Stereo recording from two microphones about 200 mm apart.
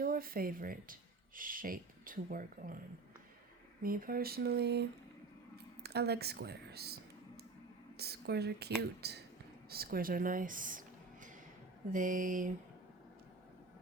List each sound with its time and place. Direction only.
0.0 s speech: 45° right (ahead or behind)
3.8 s speech: 45° right (ahead or behind)
11.9 s mantra: 40° right (ahead or behind)